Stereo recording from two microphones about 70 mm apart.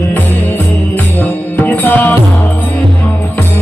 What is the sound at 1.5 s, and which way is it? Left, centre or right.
Music, left.